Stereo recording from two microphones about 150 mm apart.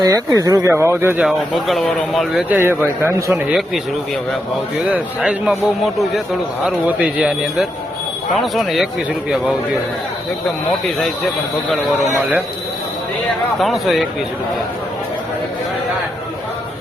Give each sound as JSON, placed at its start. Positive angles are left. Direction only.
{"t": 0.0, "sound": "speech", "side_deg": -20}
{"t": 1.4, "sound": "a man's voice", "side_deg": 0}
{"t": 2.5, "sound": "speech", "side_deg": -15}
{"t": 4.9, "sound": "a man's voice", "side_deg": -5}
{"t": 13.6, "sound": "a man's voice", "side_deg": 0}